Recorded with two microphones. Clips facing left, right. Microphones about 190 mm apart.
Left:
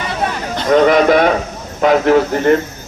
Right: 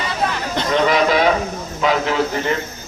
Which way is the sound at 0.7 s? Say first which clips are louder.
Left 7 dB; 50° left (ahead or behind).